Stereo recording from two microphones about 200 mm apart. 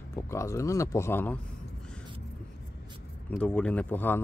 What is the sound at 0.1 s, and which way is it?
Speech, 15° left (ahead or behind).